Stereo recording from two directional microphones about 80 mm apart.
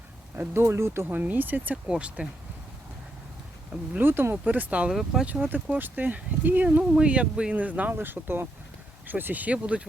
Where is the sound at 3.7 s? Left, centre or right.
Right.